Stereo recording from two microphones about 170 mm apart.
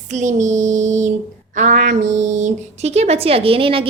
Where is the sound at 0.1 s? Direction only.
45° right (ahead or behind).